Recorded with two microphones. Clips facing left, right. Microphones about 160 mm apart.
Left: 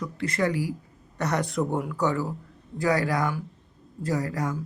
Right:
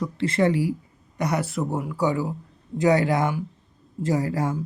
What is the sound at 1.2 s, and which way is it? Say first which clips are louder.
Speech: right 1 dB; 10° right (ahead or behind).